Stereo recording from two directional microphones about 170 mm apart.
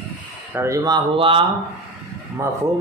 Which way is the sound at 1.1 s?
30° right (ahead or behind).